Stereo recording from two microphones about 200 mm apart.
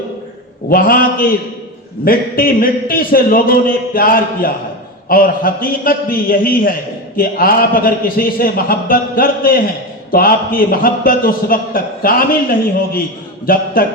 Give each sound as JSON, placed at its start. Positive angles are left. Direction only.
{"t": 0.7, "sound": "a man's voice", "side_deg": 45}